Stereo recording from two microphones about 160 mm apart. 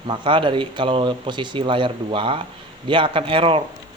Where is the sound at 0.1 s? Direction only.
30° right (ahead or behind).